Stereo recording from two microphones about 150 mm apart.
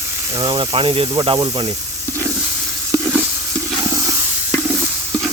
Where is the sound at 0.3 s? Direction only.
35° right (ahead or behind).